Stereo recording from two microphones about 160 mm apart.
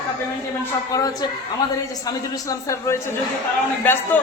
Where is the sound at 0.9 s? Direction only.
20° left (ahead or behind).